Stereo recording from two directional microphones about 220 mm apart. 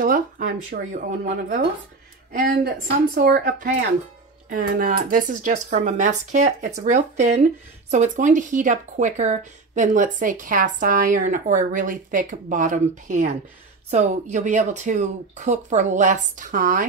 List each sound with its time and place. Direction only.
0.0 s speech: 40° right (ahead or behind)